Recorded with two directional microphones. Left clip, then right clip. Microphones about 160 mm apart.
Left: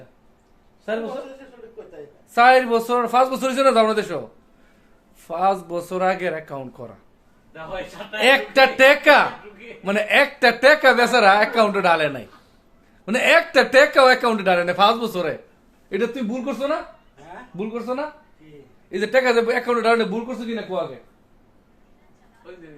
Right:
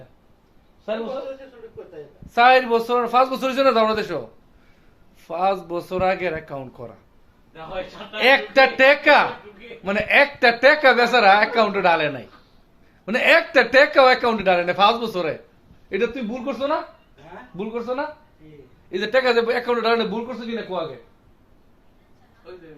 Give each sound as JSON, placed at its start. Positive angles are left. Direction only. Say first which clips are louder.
{"t": 2.3, "sound": "speech", "louder": "left 1 dB", "side_deg": 25}
{"t": 5.2, "sound": "speech", "louder": "left 1 dB", "side_deg": 20}
{"t": 8.1, "sound": "speech", "louder": "even", "side_deg": 25}